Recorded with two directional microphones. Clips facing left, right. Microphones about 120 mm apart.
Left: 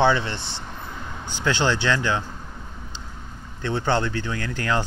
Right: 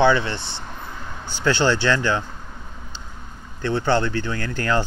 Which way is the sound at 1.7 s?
15° left (ahead or behind).